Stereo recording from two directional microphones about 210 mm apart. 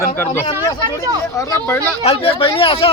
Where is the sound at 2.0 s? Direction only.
30° left (ahead or behind).